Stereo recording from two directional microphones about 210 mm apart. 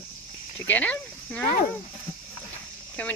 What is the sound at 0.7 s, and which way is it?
Speech, 5° left (ahead or behind).